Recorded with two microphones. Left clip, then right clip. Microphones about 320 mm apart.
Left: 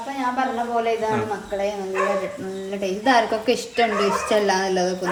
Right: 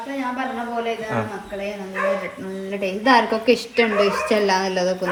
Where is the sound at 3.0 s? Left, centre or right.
Centre.